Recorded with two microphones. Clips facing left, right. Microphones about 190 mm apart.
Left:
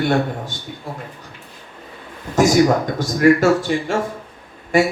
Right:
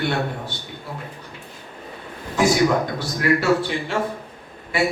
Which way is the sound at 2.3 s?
45° left (ahead or behind).